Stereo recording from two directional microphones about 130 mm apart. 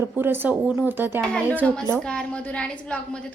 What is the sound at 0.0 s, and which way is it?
Speech, 15° right (ahead or behind).